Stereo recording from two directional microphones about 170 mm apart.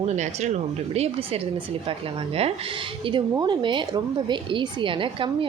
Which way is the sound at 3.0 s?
25° right (ahead or behind).